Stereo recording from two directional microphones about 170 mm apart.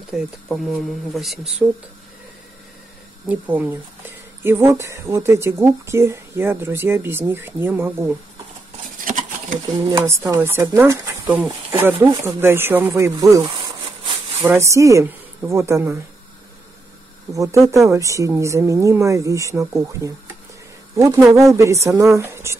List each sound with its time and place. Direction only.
0.1 s speech: centre (ahead or behind)
3.3 s speech: 10° right (ahead or behind)
9.0 s a sound: 50° right (ahead or behind)
9.8 s speech: 20° right (ahead or behind)
14.4 s speech: 15° right (ahead or behind)
17.3 s speech: 20° right (ahead or behind)